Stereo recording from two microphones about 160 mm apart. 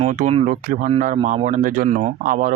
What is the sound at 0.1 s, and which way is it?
Speech, 55° right (ahead or behind).